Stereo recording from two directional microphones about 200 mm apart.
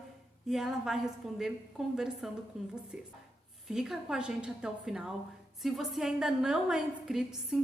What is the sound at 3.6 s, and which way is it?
A woman's voice, centre (ahead or behind).